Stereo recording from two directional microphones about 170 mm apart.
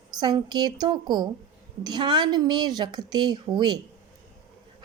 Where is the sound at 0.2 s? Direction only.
25° right (ahead or behind).